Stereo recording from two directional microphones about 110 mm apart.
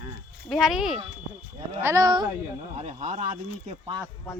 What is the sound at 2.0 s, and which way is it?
Speech, 40° right (ahead or behind).